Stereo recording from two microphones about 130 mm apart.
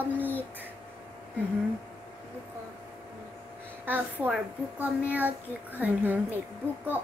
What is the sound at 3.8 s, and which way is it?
A child's voice, 15° right (ahead or behind).